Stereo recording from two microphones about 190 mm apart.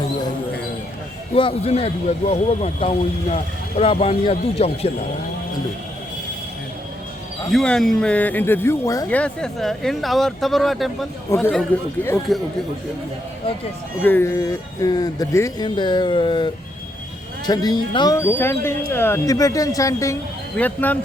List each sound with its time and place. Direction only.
1.4 s speech: 30° left (ahead or behind)
7.5 s speech: 5° left (ahead or behind)
14.0 s speech: 10° left (ahead or behind)